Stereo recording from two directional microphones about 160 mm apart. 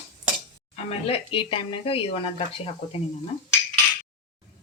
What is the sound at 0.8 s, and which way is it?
A woman's voice, 35° left (ahead or behind).